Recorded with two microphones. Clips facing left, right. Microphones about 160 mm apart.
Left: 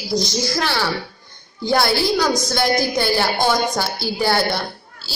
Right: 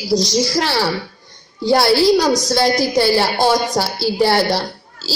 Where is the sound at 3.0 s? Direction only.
30° right (ahead or behind).